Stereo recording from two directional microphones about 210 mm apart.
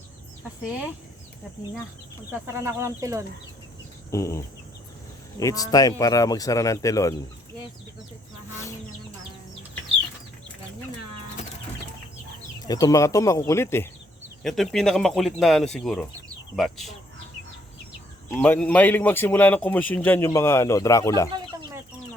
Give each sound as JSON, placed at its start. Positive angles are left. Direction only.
{"t": 2.5, "sound": "speech", "side_deg": -15}
{"t": 4.1, "sound": "a man's voice", "side_deg": 15}
{"t": 12.6, "sound": "a man's voice", "side_deg": 15}
{"t": 14.4, "sound": "speech", "side_deg": 0}
{"t": 18.3, "sound": "a man's voice", "side_deg": 10}